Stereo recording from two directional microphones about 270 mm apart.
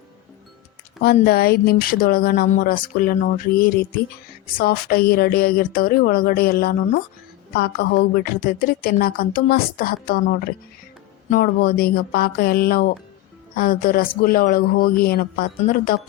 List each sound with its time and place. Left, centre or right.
1.0 s a woman's voice: left